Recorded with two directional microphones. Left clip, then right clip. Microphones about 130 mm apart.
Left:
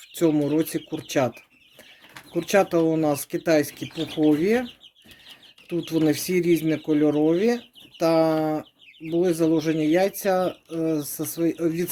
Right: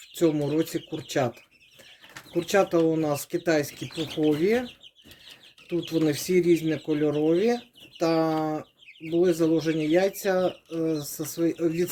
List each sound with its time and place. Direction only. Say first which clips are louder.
0.1 s speech: left 3 dB; 35° left (ahead or behind)
2.3 s speech: left 2 dB; 40° left (ahead or behind)
3.9 s speech: left 3 dB; 10° left (ahead or behind)
4.3 s speech: left 2 dB; 35° left (ahead or behind)
5.6 s speech: left 3 dB; 40° left (ahead or behind)